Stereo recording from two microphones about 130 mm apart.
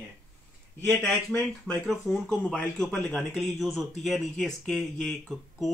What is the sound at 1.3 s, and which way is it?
Speech, 15° left (ahead or behind).